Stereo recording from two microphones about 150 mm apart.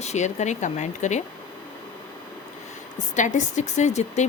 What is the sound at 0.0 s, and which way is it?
Speech, 50° left (ahead or behind).